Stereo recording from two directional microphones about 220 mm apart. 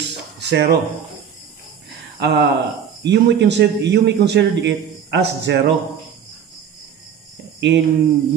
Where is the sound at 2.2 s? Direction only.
50° right (ahead or behind).